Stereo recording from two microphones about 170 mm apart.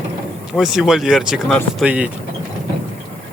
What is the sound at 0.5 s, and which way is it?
Speech, centre (ahead or behind).